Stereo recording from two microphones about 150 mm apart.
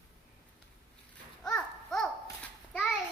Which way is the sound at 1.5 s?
5° left (ahead or behind).